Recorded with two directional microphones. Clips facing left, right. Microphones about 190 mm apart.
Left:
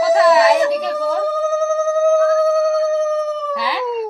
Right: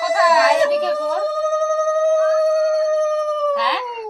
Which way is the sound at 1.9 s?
10° left (ahead or behind).